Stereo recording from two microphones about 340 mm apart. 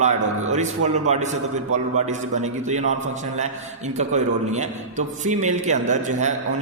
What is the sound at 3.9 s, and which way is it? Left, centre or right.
A man's voice, centre.